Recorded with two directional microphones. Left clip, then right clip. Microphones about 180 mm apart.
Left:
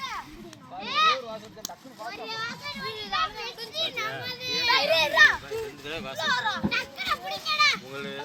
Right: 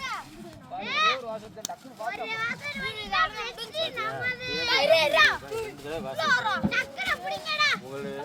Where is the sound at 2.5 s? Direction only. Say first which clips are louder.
Right 3 dB; 65° left (ahead or behind).